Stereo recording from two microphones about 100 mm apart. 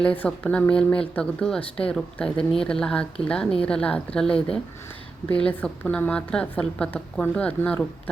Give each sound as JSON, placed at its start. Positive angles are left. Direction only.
{"t": 0.0, "sound": "a woman's voice", "side_deg": 10}